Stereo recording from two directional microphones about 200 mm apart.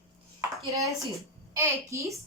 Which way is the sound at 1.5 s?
15° right (ahead or behind).